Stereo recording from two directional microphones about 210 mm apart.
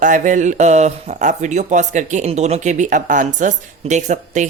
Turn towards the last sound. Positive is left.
turn(degrees=-35)  # may be behind; listen again after turning